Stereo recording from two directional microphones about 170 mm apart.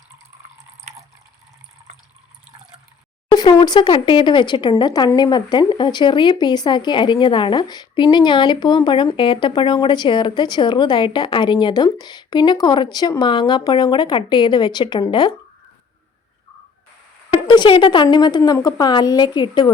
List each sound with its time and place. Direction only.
3.2 s speech: 25° left (ahead or behind)
17.3 s speech: 25° left (ahead or behind)